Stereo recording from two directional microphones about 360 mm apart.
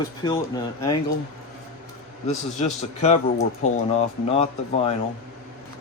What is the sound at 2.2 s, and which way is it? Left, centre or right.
Speech, centre.